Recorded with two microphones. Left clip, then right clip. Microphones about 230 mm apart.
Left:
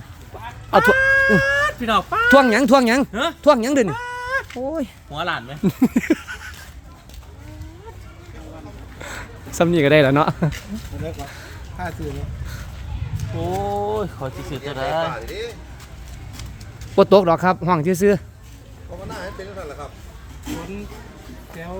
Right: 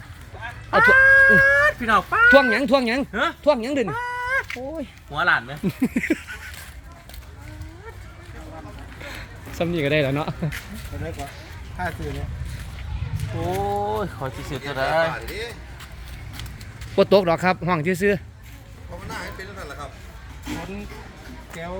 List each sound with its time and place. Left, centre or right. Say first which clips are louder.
0.7 s speech: right 1 dB; left
4.5 s speech: left 6 dB; left
9.0 s a sound: left 4 dB; left
11.8 s speech: right 1 dB; centre
13.7 s speech: left 1 dB; left
14.6 s speech: right 2 dB; centre
15.0 s speech: even; right
16.9 s speech: left 4 dB; centre